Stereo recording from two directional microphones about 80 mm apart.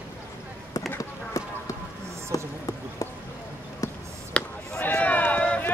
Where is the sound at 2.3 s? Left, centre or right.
Left.